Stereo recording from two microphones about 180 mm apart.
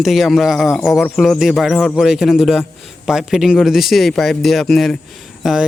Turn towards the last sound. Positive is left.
turn(degrees=0)  # may be behind; listen again after turning